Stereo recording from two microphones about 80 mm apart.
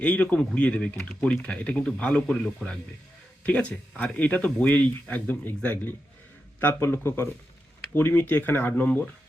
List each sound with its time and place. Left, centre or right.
0.0 s speech: centre